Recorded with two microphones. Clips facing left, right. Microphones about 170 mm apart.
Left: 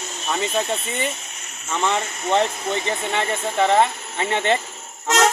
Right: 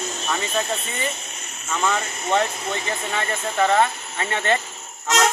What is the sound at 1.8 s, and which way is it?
Speech, 25° left (ahead or behind).